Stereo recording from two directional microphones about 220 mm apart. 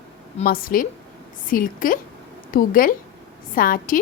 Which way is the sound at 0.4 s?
40° left (ahead or behind).